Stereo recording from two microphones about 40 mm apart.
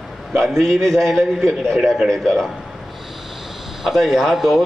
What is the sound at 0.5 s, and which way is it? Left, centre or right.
A man's voice, centre.